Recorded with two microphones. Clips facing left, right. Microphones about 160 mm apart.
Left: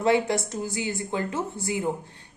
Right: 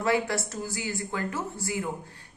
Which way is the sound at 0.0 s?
20° left (ahead or behind).